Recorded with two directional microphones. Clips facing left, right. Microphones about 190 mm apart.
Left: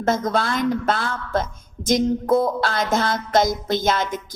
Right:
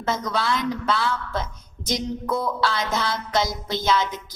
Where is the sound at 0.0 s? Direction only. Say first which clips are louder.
Left 5 dB; 50° left (ahead or behind).